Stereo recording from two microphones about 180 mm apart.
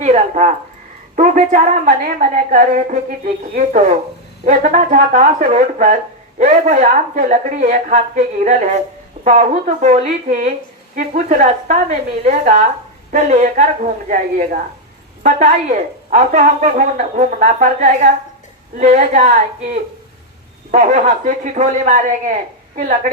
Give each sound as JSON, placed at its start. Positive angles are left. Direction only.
{"t": 0.0, "sound": "a woman's voice", "side_deg": -40}